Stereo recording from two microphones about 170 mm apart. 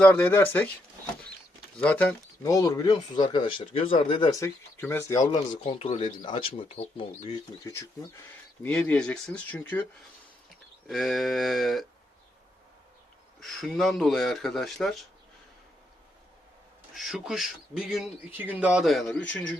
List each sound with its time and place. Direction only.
0.0 s speech: 10° left (ahead or behind)
1.8 s speech: 10° left (ahead or behind); by 7.7 s 30° left (ahead or behind)
7.7 s speech: 15° left (ahead or behind)
10.8 s speech: centre (ahead or behind)
13.4 s speech: centre (ahead or behind)
16.9 s speech: centre (ahead or behind)